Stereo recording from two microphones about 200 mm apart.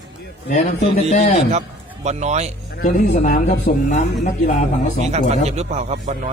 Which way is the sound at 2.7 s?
40° left (ahead or behind).